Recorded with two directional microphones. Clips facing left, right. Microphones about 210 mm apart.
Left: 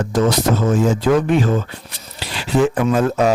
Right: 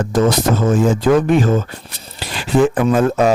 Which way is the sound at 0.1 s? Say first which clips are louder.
Right 1 dB; 50° right (ahead or behind).